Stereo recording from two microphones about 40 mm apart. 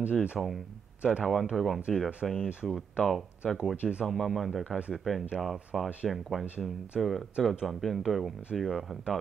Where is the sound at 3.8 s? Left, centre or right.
Right.